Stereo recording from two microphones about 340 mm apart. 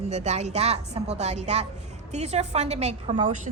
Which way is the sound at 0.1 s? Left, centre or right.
Centre.